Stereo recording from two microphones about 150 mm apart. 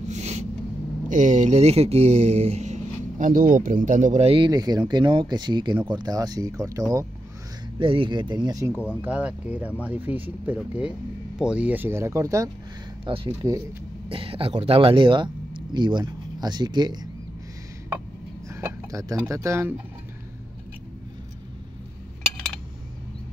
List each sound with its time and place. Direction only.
0.1 s a sound: 50° right (ahead or behind)
1.0 s speech: 55° right (ahead or behind)
4.3 s speech: 30° right (ahead or behind)
7.8 s speech: 35° right (ahead or behind)
9.0 s speech: 10° right (ahead or behind)
13.0 s speech: 35° right (ahead or behind)
18.5 s speech: 20° right (ahead or behind)